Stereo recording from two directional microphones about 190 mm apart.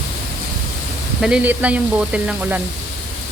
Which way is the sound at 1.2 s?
5° right (ahead or behind).